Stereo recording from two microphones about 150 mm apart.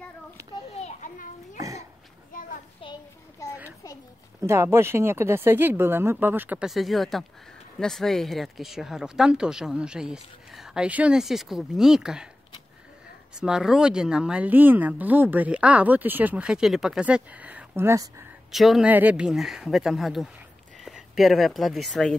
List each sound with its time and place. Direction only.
0.7 s children playing: 50° left (ahead or behind)
2.8 s a sound: 35° left (ahead or behind)
4.4 s speech: 20° right (ahead or behind)
6.7 s speech: centre (ahead or behind)
13.4 s speech: 5° right (ahead or behind); by 18.2 s 20° right (ahead or behind)
18.5 s speech: centre (ahead or behind)